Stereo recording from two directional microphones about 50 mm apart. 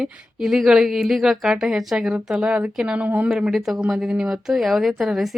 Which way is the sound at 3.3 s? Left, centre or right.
Centre.